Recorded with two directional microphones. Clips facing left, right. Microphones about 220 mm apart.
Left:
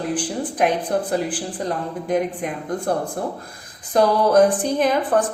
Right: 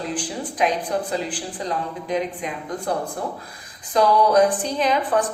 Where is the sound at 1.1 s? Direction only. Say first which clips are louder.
Left 4 dB; 50° left (ahead or behind).